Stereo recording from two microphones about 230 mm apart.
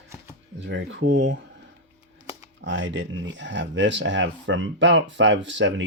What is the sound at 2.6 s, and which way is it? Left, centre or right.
Speech, right.